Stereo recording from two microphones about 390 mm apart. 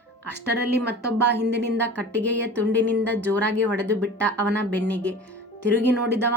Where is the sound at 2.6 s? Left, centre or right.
Centre.